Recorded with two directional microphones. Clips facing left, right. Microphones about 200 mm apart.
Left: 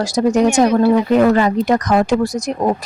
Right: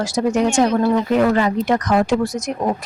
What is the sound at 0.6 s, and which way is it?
Speech, 10° left (ahead or behind).